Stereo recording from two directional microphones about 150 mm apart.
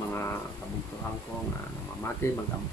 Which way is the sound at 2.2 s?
15° left (ahead or behind).